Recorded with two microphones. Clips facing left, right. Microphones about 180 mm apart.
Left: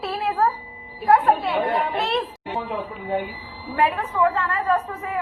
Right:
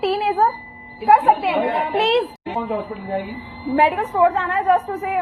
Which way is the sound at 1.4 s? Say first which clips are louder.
Right 3 dB; 15° right (ahead or behind).